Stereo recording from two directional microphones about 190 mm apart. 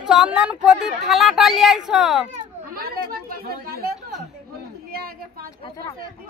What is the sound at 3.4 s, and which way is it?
Speech, 55° right (ahead or behind).